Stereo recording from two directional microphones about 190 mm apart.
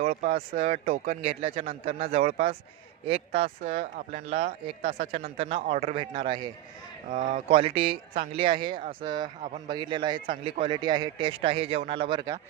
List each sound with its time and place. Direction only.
0.0 s speech: 35° right (ahead or behind)
3.7 s speech: 35° right (ahead or behind)
5.4 s a man's voice: 30° right (ahead or behind)
7.1 s speech: 45° right (ahead or behind)
7.4 s a man's voice: 30° right (ahead or behind)